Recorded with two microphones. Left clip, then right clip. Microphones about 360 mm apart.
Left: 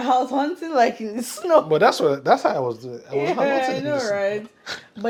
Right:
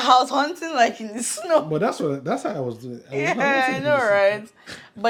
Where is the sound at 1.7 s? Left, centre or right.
Left.